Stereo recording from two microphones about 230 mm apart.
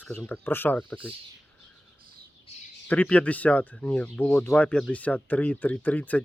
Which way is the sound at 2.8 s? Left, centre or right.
Centre.